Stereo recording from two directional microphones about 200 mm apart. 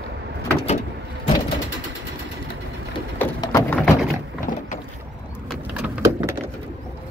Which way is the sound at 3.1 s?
10° left (ahead or behind).